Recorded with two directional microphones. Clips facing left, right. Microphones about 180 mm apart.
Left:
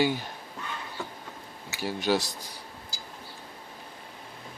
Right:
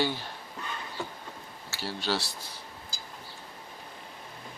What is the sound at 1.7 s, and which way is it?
Speech, 15° left (ahead or behind).